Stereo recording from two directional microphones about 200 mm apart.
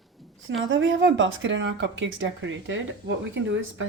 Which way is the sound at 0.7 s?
70° right (ahead or behind).